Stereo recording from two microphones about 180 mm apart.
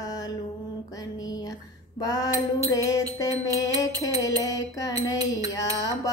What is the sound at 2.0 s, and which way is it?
Mantra, 20° left (ahead or behind).